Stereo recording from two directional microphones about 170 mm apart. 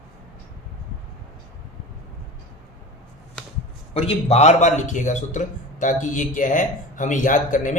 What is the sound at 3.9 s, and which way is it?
Speech, 35° left (ahead or behind).